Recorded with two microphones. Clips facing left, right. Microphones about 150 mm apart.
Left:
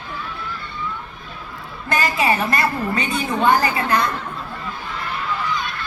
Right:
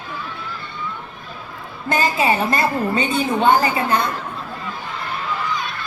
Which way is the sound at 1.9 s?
25° right (ahead or behind).